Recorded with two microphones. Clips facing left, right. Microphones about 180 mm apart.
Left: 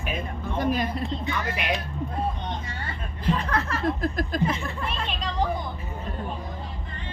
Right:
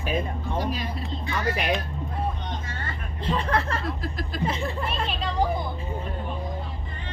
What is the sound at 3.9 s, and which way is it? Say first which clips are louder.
Speech: left 6 dB; 50° left (ahead or behind).